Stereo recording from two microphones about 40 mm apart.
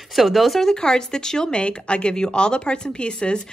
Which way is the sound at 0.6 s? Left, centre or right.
Centre.